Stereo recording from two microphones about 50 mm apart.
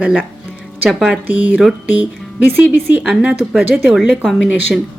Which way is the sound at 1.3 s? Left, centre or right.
Right.